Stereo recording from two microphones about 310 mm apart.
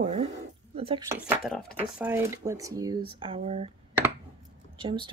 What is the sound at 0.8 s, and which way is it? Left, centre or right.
Speech, centre.